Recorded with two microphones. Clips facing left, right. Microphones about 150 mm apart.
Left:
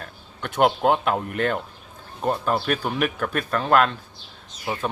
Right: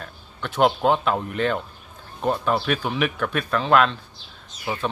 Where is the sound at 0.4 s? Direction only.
50° left (ahead or behind).